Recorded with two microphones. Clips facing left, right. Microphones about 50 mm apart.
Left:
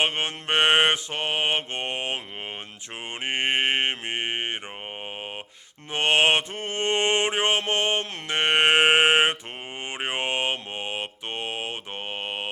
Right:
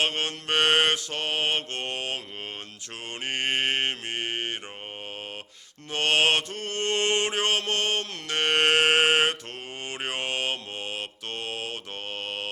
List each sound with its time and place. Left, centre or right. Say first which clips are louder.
0.0 s mantra: left 2 dB; left
5.9 s mantra: left 2 dB; left